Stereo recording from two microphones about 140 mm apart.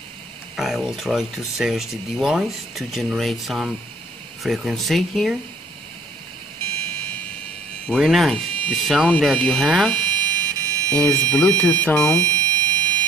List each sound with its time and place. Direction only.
0.6 s speech: centre (ahead or behind)
7.9 s speech: centre (ahead or behind)
9.9 s buzzer: 30° right (ahead or behind)
11.0 s speech: 10° left (ahead or behind)
12.2 s fire alarm: 25° right (ahead or behind)